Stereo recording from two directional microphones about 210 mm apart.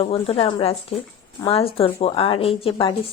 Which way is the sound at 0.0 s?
30° left (ahead or behind).